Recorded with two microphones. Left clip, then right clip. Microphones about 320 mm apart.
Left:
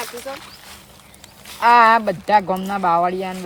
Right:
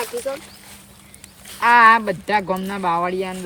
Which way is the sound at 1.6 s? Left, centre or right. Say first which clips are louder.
Even; left.